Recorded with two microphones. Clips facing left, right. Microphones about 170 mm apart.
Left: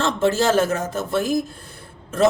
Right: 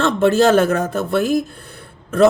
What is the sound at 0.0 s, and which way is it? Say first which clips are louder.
Speech: right 5 dB; 60° right (ahead or behind).